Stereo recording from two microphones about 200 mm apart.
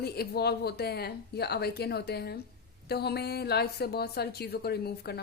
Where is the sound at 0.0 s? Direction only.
50° left (ahead or behind).